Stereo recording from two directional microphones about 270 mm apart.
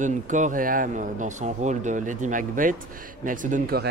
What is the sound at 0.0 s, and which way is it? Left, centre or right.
Speech, right.